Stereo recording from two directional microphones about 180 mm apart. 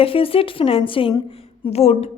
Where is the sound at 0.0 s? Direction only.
30° left (ahead or behind).